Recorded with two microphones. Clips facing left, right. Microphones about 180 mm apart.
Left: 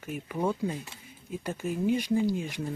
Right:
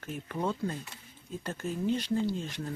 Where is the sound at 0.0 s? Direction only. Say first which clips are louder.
Left 3 dB; 10° left (ahead or behind).